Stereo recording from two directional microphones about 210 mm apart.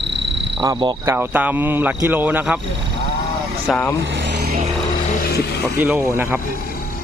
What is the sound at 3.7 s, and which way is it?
Speech, centre (ahead or behind).